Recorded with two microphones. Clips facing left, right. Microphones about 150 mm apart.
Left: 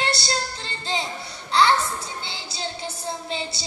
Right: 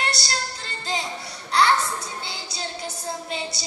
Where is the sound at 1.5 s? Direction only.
25° left (ahead or behind).